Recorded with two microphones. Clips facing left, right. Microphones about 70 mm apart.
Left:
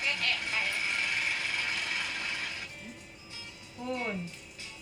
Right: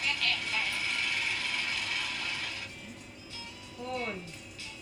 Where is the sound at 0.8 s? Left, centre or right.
Left.